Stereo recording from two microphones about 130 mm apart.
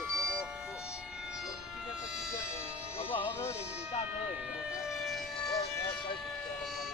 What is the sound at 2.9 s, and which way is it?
Music, 50° left (ahead or behind).